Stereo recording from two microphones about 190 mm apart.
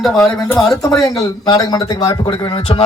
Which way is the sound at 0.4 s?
10° left (ahead or behind).